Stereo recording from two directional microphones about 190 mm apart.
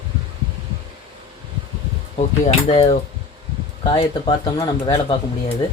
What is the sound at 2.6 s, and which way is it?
Speech, 30° left (ahead or behind).